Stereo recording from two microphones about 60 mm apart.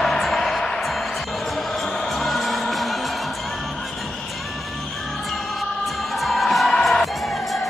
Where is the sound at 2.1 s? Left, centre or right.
Centre.